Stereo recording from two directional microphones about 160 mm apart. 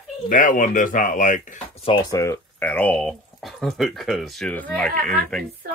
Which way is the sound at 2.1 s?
20° left (ahead or behind).